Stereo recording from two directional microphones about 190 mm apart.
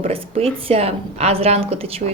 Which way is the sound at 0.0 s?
30° right (ahead or behind).